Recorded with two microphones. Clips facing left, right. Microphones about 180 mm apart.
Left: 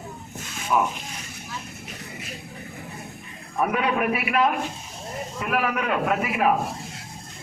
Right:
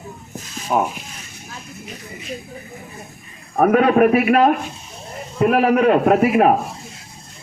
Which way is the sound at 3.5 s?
50° right (ahead or behind).